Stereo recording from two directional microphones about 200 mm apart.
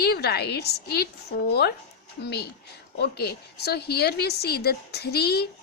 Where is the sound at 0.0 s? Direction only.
55° left (ahead or behind).